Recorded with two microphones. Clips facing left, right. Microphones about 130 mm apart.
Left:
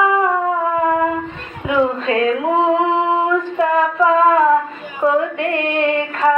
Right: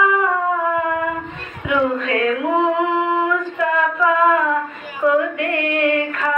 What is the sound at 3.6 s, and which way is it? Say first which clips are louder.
Female singing: left 4 dB; 30° left (ahead or behind).